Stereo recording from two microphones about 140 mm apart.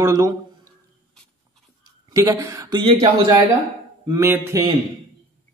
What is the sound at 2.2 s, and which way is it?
A man's voice, 25° right (ahead or behind).